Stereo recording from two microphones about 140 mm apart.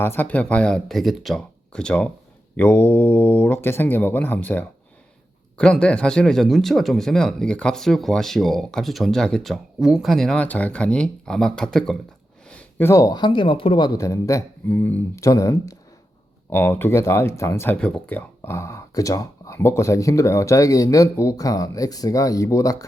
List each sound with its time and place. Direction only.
0.0 s speech: 15° left (ahead or behind)
12.5 s a sound: 10° left (ahead or behind)
12.9 s speech: 25° left (ahead or behind)
17.7 s speech: 10° left (ahead or behind); by 22.9 s 25° left (ahead or behind)